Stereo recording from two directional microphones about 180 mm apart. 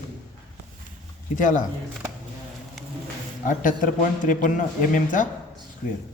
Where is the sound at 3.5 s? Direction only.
45° left (ahead or behind).